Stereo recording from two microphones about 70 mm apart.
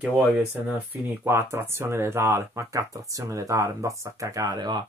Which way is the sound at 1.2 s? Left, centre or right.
Right.